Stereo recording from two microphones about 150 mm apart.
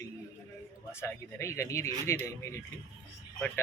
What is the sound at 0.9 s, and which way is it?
Speech, 15° left (ahead or behind).